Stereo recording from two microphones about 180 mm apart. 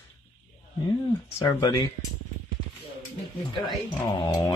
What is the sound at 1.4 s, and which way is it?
Speech, 15° left (ahead or behind).